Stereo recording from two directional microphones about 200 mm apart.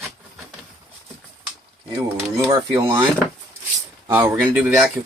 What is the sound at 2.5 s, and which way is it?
Speech, 25° right (ahead or behind).